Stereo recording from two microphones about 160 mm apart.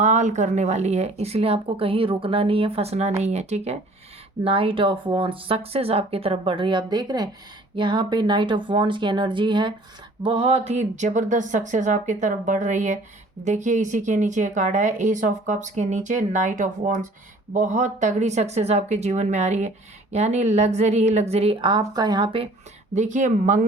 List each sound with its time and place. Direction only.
0.0 s speech: 50° right (ahead or behind); by 22.4 s 35° right (ahead or behind)
23.0 s speech: 50° right (ahead or behind)